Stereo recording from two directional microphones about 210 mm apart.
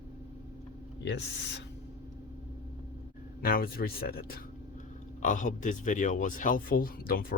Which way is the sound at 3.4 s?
45° left (ahead or behind).